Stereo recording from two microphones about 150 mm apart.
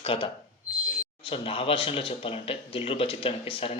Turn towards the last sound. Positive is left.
turn(degrees=35)  # may be behind; listen again after turning